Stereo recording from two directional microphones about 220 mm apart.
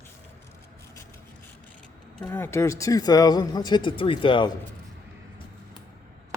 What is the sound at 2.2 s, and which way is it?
Speech, 10° left (ahead or behind).